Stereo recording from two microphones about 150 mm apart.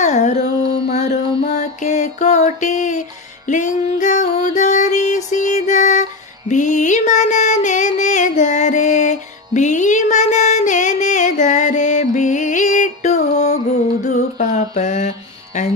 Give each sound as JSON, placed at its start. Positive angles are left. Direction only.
{"t": 0.0, "sound": "music", "side_deg": 50}
{"t": 14.0, "sound": "mantra", "side_deg": 55}